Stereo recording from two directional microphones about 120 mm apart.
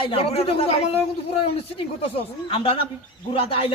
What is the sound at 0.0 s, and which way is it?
Speech, 50° left (ahead or behind).